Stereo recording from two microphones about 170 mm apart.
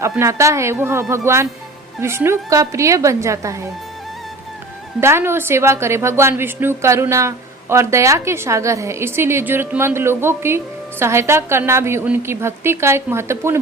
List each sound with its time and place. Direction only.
0.0 s a woman's voice: 15° right (ahead or behind)
4.9 s a woman's voice: 15° right (ahead or behind)